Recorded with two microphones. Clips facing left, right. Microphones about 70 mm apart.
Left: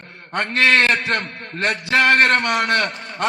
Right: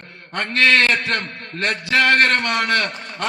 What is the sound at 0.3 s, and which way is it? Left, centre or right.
A man's voice, left.